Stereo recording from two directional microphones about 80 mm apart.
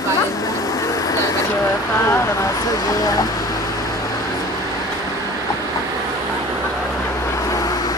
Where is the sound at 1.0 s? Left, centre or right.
Left.